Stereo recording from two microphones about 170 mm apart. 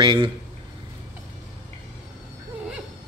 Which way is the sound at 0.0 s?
30° right (ahead or behind).